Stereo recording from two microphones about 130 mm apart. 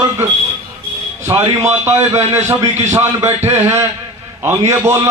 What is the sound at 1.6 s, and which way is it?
Speech, 20° right (ahead or behind).